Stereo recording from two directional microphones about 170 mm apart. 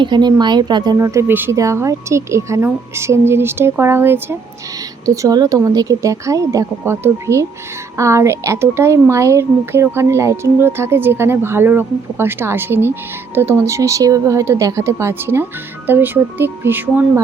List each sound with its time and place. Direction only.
0.0 s a woman's voice: 25° right (ahead or behind); by 17.1 s 10° right (ahead or behind)